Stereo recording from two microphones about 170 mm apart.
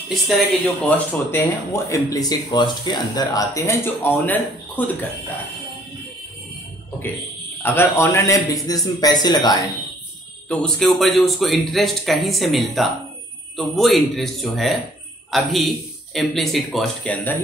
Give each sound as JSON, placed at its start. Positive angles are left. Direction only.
{"t": 0.5, "sound": "speech", "side_deg": 5}
{"t": 7.6, "sound": "a man's voice", "side_deg": 10}
{"t": 10.5, "sound": "speech", "side_deg": 5}